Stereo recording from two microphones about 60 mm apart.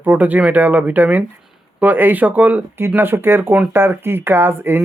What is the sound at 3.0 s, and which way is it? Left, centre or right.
Speech, right.